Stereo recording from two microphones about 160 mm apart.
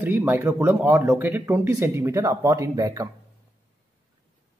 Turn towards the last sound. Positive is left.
turn(degrees=-20)  # may be behind; listen again after turning